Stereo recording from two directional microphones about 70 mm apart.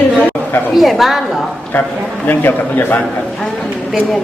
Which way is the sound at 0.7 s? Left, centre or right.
Centre.